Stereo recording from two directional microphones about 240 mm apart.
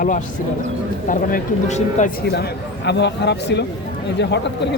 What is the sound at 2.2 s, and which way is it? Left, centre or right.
Speech, left.